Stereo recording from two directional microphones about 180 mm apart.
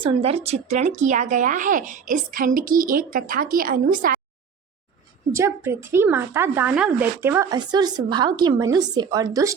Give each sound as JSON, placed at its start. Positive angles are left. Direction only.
{"t": 0.0, "sound": "a woman's voice", "side_deg": -30}
{"t": 5.3, "sound": "a woman's voice", "side_deg": -15}